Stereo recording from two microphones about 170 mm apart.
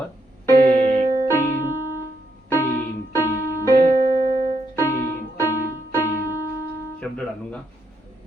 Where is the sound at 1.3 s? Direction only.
15° left (ahead or behind).